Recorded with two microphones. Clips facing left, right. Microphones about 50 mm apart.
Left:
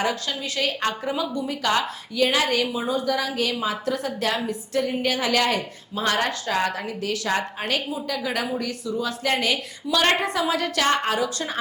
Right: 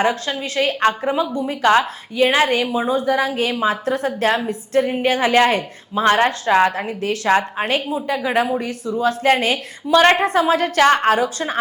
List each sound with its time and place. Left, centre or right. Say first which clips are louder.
0.0 s a woman's voice: right 6 dB; right